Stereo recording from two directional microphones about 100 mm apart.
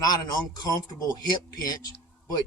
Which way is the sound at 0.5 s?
40° left (ahead or behind).